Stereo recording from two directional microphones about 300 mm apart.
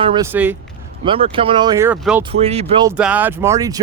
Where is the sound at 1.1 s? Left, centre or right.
Centre.